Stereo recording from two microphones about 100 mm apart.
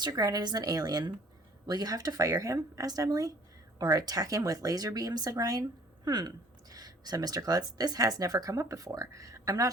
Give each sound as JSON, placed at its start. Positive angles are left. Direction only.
{"t": 0.0, "sound": "speech", "side_deg": -40}